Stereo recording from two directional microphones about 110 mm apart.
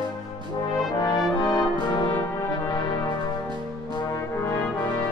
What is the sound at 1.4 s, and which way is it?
Brass instrument, 40° left (ahead or behind).